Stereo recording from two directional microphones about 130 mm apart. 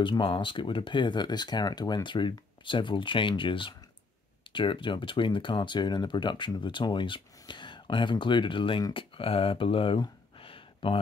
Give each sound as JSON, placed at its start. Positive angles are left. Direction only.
{"t": 0.0, "sound": "speech", "side_deg": 40}